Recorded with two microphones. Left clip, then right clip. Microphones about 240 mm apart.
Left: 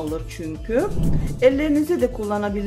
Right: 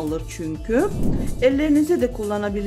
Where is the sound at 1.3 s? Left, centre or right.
Centre.